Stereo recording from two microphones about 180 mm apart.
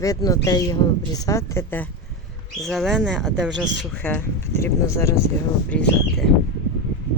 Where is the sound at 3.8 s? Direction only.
10° left (ahead or behind).